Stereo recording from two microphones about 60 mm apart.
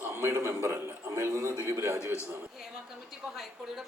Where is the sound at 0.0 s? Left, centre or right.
Right.